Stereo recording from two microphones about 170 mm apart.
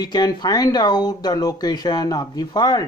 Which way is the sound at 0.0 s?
25° left (ahead or behind).